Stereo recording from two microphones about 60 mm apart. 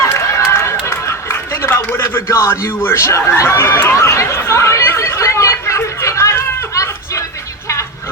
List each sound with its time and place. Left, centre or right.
0.1 s run: left
2.0 s a man's voice: left
3.9 s chatter: left
6.7 s a sound: left